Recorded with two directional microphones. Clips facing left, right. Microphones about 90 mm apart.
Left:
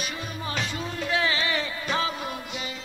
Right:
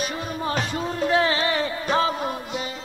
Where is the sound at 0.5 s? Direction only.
40° right (ahead or behind).